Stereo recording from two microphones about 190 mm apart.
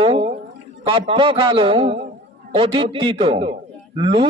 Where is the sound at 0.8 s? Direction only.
25° right (ahead or behind).